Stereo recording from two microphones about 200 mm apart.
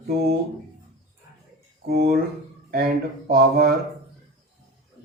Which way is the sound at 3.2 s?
50° right (ahead or behind).